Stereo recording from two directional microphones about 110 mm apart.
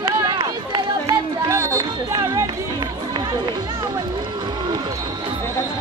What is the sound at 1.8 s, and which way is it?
Music, 35° right (ahead or behind).